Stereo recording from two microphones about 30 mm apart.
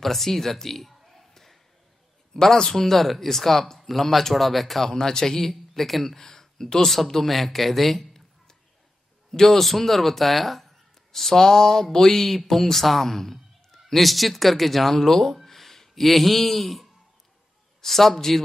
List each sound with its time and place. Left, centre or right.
0.0 s speech: centre
1.3 s a sound: centre
2.5 s speech: centre
2.8 s speech: centre
4.8 s speech: centre
6.1 s speech: centre
7.1 s a man's voice: centre
15.4 s a sound: centre
17.8 s speech: centre